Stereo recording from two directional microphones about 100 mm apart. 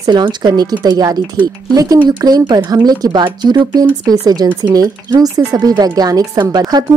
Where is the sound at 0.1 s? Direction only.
50° right (ahead or behind).